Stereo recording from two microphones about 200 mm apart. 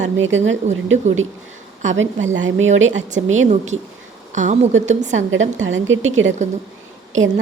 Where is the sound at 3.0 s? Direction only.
40° right (ahead or behind).